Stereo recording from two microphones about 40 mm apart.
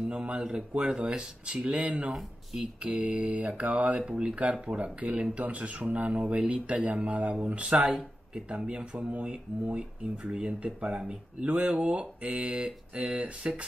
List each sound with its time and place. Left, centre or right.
0.1 s speech: right
7.6 s speech: right
10.0 s speech: centre